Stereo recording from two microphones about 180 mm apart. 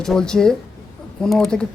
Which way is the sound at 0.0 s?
5° left (ahead or behind).